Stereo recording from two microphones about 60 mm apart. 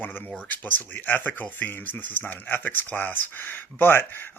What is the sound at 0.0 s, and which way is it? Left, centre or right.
Speech, left.